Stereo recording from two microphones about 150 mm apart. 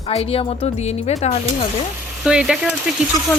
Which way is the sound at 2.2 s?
5° right (ahead or behind).